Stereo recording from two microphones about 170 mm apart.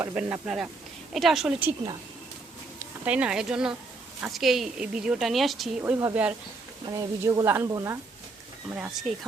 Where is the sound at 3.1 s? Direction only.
5° right (ahead or behind).